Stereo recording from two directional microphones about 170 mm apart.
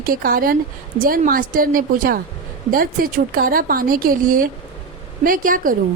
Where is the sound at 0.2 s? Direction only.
55° right (ahead or behind).